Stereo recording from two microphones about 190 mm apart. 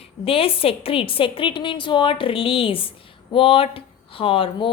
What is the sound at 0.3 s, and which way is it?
A woman's voice, 30° left (ahead or behind).